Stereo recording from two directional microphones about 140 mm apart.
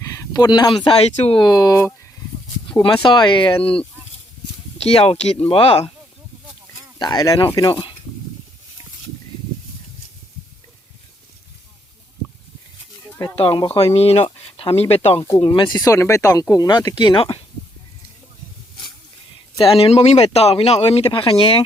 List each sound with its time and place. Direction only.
0.0 s a sound: 25° left (ahead or behind)
1.0 s speech: 45° left (ahead or behind)
1.4 s speech: 25° left (ahead or behind)
2.8 s speech: 35° left (ahead or behind)
4.8 s speech: 45° left (ahead or behind)
7.0 s speech: 30° left (ahead or behind)
13.2 s speech: 40° left (ahead or behind)
15.4 s speech: 35° left (ahead or behind)
19.5 s speech: 40° left (ahead or behind)